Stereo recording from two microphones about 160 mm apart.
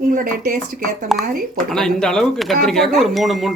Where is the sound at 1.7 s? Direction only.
5° left (ahead or behind).